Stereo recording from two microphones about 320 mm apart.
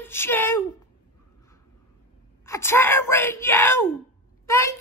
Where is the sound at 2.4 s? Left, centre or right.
Centre.